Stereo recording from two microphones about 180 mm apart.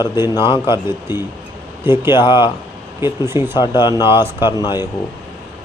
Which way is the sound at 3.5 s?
25° left (ahead or behind).